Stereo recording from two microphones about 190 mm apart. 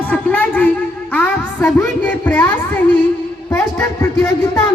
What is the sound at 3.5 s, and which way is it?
Speech, 15° left (ahead or behind).